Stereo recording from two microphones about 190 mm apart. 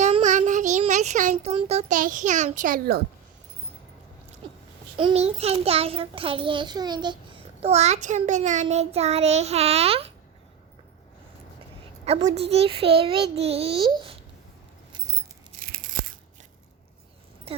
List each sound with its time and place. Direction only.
0.0 s speech: 40° right (ahead or behind)
4.9 s a child's voice: 30° right (ahead or behind)
12.0 s a child's voice: 35° right (ahead or behind)
17.5 s music: 30° right (ahead or behind)